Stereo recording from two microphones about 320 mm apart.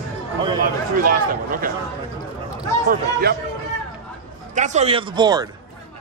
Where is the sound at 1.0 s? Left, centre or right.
Right.